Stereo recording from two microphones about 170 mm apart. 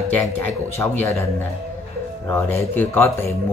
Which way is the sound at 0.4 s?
10° left (ahead or behind).